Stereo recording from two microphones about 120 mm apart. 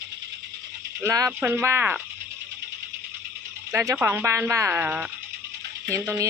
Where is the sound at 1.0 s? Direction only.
30° right (ahead or behind).